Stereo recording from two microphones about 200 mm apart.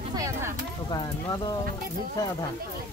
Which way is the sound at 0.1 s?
15° right (ahead or behind).